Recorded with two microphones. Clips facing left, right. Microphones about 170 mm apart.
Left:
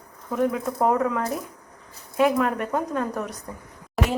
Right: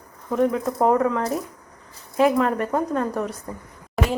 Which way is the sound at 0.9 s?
5° left (ahead or behind).